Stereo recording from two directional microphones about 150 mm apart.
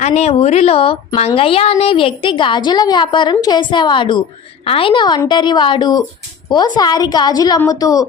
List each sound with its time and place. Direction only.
0.0 s a woman's voice: 45° left (ahead or behind); by 8.0 s 25° left (ahead or behind)